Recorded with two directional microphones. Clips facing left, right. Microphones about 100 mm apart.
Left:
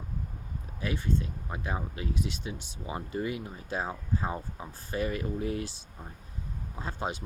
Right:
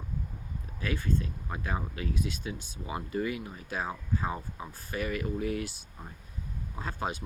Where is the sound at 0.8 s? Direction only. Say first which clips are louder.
Even; 25° left (ahead or behind).